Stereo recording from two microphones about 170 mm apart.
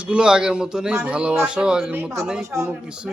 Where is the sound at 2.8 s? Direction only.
5° right (ahead or behind).